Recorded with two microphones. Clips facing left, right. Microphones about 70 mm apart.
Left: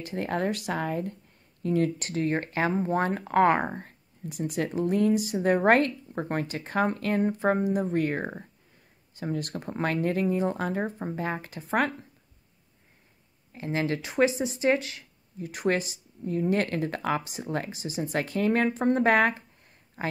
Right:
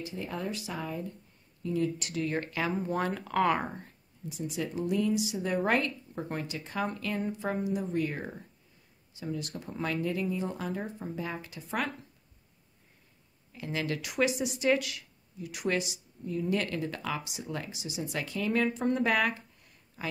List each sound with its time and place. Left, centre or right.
0.0 s speech: left
2.0 s speech: left
13.5 s speech: left